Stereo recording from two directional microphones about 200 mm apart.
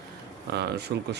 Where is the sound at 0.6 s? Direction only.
55° right (ahead or behind).